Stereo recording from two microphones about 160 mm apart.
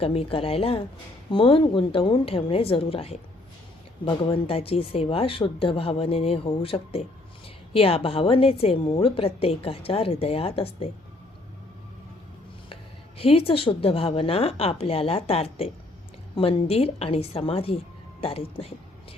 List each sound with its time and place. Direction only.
0.0 s a woman's voice: 35° left (ahead or behind)
13.1 s a woman's voice: 35° left (ahead or behind)